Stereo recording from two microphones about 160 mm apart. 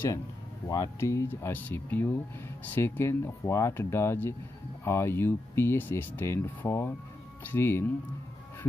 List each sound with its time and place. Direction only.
0.7 s speech: 20° left (ahead or behind)